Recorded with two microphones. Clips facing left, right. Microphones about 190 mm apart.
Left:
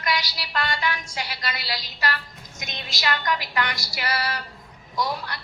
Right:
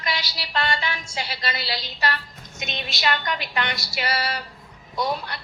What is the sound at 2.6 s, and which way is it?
A woman's voice, 25° right (ahead or behind).